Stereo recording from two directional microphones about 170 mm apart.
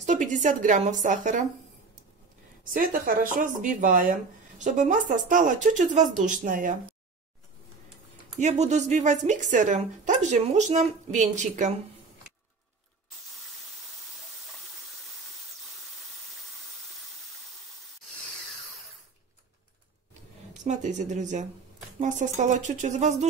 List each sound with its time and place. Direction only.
0.0 s a woman's voice: 45° right (ahead or behind)
2.7 s a woman's voice: 55° right (ahead or behind)
8.4 s a woman's voice: 40° right (ahead or behind)
20.5 s a woman's voice: 45° right (ahead or behind)